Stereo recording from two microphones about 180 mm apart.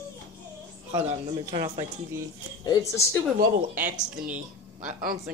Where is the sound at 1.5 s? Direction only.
30° right (ahead or behind).